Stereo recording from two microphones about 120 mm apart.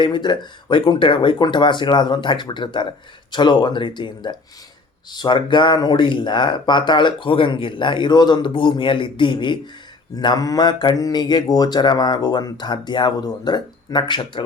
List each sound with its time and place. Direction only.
0.0 s speech: 40° left (ahead or behind)